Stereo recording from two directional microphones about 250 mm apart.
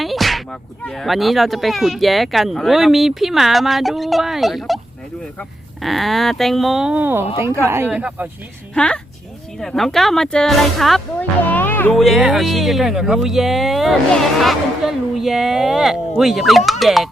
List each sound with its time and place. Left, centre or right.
0.0 s speech: centre
7.3 s a woman's voice: left
7.6 s a woman's voice: centre